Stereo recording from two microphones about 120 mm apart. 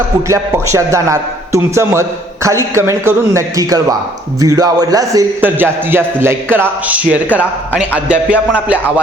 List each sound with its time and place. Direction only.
0.3 s a man's voice: 25° right (ahead or behind)
5.4 s a man's voice: 15° right (ahead or behind)